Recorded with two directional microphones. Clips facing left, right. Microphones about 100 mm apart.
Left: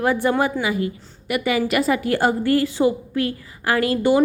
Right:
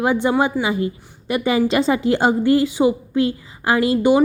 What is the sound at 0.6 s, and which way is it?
A woman's voice, 25° right (ahead or behind).